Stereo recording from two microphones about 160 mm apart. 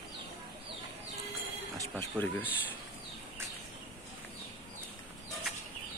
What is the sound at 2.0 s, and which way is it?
Speech, 10° left (ahead or behind).